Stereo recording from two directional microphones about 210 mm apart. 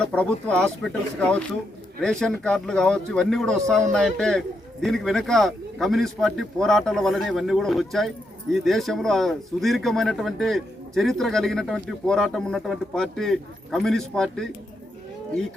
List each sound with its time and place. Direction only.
0.0 s a man's voice: 5° left (ahead or behind)